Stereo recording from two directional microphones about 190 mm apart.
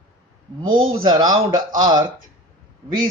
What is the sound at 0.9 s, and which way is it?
Speech, 20° right (ahead or behind).